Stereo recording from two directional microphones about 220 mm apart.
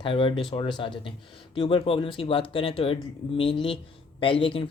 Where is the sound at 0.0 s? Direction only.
25° left (ahead or behind).